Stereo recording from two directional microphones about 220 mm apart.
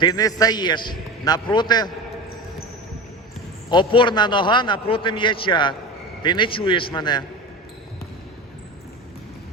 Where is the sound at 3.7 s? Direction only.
20° left (ahead or behind).